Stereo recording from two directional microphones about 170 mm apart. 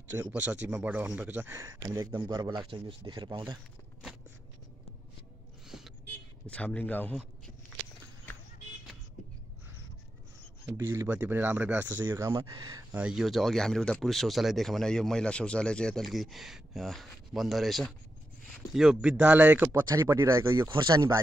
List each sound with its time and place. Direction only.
0.1 s speech: 10° right (ahead or behind)
5.7 s a sound: centre (ahead or behind)
6.4 s speech: 5° left (ahead or behind)
10.7 s speech: 15° right (ahead or behind)
12.9 s speech: 5° right (ahead or behind); by 21.2 s 20° right (ahead or behind)